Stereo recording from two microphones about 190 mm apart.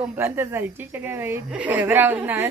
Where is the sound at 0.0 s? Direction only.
10° right (ahead or behind).